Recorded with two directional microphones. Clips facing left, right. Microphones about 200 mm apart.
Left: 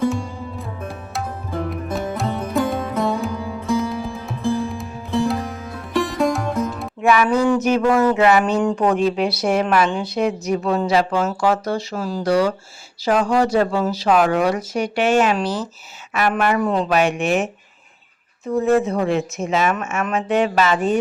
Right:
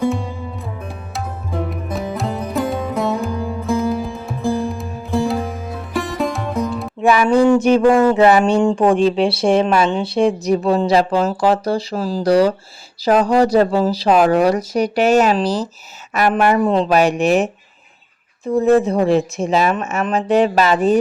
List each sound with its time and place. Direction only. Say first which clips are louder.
0.0 s music: right 1 dB; centre (ahead or behind)
7.0 s speech: right 3 dB; 30° right (ahead or behind)